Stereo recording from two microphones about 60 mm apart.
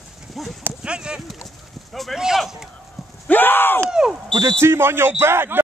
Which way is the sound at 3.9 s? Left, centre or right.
Centre.